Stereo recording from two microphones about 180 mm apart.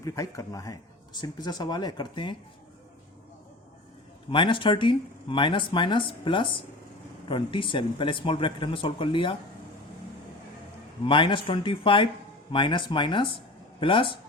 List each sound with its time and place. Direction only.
0.0 s speech: 20° left (ahead or behind)
4.3 s speech: 30° left (ahead or behind)
11.0 s speech: 25° left (ahead or behind)